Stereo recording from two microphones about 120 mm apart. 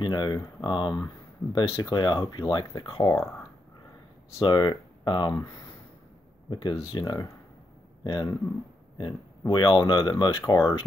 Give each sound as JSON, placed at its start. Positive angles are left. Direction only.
{"t": 0.0, "sound": "speech", "side_deg": 40}
{"t": 4.4, "sound": "speech", "side_deg": 40}
{"t": 6.5, "sound": "speech", "side_deg": 40}
{"t": 9.5, "sound": "speech", "side_deg": 40}